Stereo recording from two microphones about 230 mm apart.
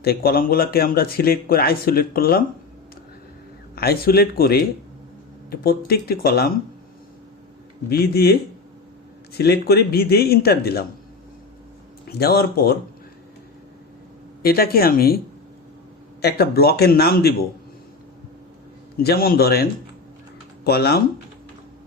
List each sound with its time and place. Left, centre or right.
0.0 s a man's voice: left
3.8 s a man's voice: left
7.9 s a man's voice: left
12.0 s a man's voice: left
14.4 s a man's voice: left
16.2 s a man's voice: left
18.9 s a man's voice: left
20.7 s a man's voice: left